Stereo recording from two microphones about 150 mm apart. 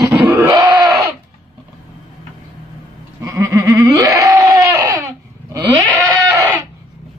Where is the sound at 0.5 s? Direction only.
25° right (ahead or behind).